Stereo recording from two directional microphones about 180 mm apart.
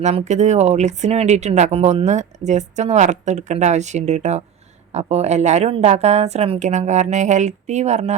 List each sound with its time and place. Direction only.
0.0 s speech: 40° right (ahead or behind)